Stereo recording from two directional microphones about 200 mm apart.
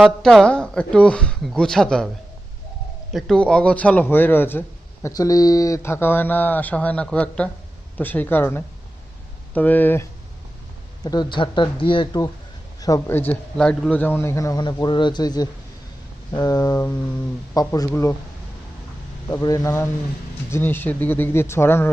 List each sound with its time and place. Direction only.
0.2 s speech: 5° left (ahead or behind)
3.1 s a man's voice: centre (ahead or behind)
11.0 s a man's voice: 20° left (ahead or behind)
19.3 s a man's voice: 15° left (ahead or behind)